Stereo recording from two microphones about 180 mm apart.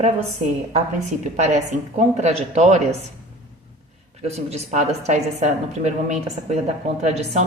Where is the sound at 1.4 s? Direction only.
40° right (ahead or behind).